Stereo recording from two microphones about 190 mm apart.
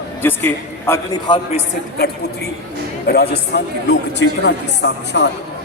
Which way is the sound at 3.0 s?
60° left (ahead or behind).